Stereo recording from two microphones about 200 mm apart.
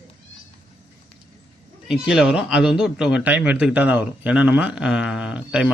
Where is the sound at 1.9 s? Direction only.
5° right (ahead or behind).